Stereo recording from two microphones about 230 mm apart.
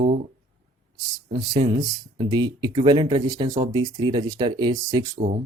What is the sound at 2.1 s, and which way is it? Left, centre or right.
Speech, centre.